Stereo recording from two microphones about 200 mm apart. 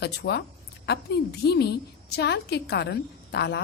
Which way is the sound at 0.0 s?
55° left (ahead or behind).